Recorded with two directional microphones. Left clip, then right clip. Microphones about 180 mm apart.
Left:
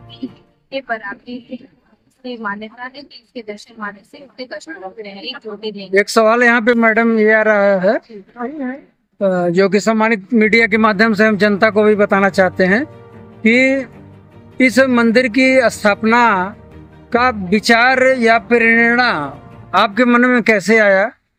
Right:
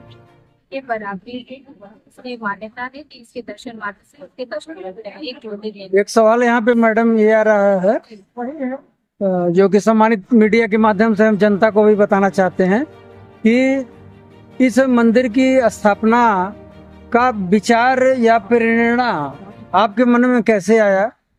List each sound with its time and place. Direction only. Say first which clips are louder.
0.7 s a woman's voice: left 1 dB; 35° right (ahead or behind)
5.9 s speech: left 1 dB; 5° right (ahead or behind)
9.2 s speech: left 1 dB; 5° right (ahead or behind)